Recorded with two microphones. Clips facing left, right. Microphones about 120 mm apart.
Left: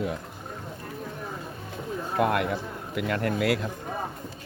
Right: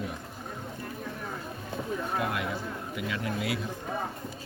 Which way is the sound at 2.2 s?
60° left (ahead or behind).